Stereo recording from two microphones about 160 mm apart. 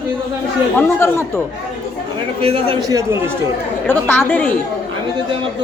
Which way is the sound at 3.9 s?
10° left (ahead or behind).